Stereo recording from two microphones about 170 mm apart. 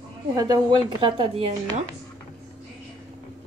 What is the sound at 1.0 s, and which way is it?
Speech, 35° right (ahead or behind).